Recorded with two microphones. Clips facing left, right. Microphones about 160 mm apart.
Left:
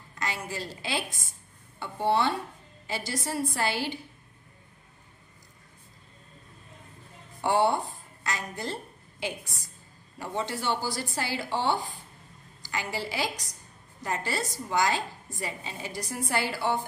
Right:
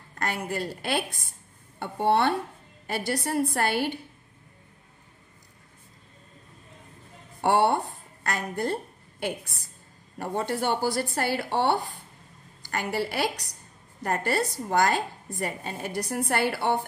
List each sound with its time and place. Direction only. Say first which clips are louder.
0.1 s a woman's voice: right 4 dB; 55° right (ahead or behind)
7.4 s a woman's voice: right 2 dB; 65° right (ahead or behind)